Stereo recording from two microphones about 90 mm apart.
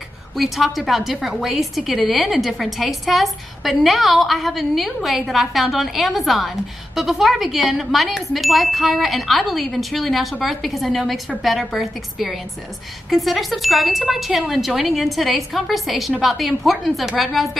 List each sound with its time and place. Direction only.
0.4 s a woman's voice: centre (ahead or behind)